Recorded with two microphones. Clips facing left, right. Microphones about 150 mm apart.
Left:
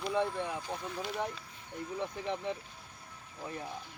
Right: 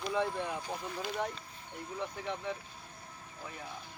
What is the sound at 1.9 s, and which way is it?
Speech, 25° left (ahead or behind).